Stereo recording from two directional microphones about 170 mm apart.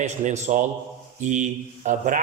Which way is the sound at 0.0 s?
40° right (ahead or behind).